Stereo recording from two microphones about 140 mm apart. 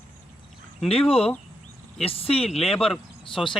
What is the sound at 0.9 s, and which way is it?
Speech, 45° left (ahead or behind).